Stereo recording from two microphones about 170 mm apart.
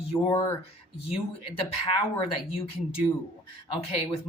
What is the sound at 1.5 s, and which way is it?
Speech, 30° left (ahead or behind).